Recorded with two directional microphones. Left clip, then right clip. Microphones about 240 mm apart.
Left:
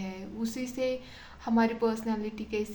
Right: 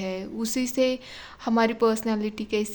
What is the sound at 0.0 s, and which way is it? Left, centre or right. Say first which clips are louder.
A woman's voice: right 7 dB; right.